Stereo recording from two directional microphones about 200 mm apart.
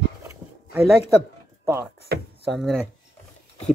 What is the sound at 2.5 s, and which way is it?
Speech, centre (ahead or behind).